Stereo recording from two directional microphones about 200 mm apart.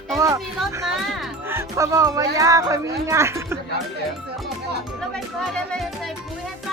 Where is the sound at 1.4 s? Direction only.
10° right (ahead or behind).